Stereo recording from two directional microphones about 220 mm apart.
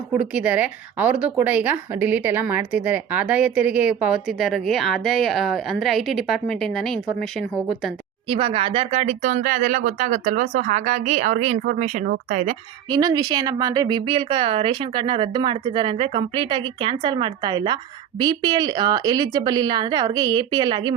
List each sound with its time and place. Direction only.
0.1 s a woman's voice: 5° right (ahead or behind)
8.3 s speech: 25° right (ahead or behind)
12.9 s speech: 15° right (ahead or behind)